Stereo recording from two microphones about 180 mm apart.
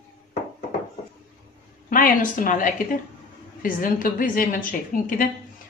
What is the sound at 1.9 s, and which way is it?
Speech, 50° left (ahead or behind).